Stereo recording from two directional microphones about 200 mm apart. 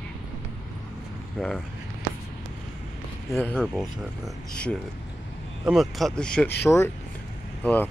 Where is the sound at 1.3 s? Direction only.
Centre (ahead or behind).